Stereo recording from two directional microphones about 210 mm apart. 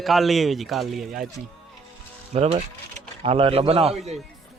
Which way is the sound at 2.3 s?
30° right (ahead or behind).